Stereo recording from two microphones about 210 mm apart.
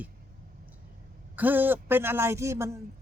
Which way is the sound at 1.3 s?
10° right (ahead or behind).